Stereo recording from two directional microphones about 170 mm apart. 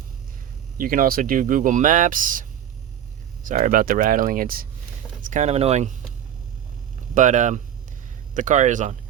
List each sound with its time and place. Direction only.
0.8 s speech: 55° right (ahead or behind)
5.2 s speech: 45° right (ahead or behind)
7.1 s speech: 45° right (ahead or behind)